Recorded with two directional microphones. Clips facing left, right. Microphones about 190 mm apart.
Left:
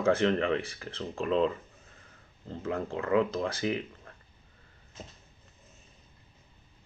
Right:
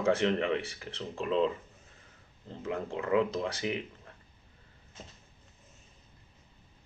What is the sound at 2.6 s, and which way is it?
Speech, 20° right (ahead or behind).